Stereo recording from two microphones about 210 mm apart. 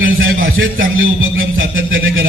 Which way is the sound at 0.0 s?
70° right (ahead or behind).